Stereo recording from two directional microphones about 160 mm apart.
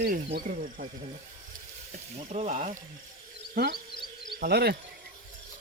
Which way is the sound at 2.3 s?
50° right (ahead or behind).